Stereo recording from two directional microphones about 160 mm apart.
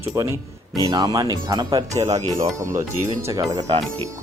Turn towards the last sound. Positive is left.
turn(degrees=-20)  # may be behind; listen again after turning